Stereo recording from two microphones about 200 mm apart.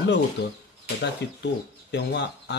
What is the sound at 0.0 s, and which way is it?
Speech, 60° left (ahead or behind).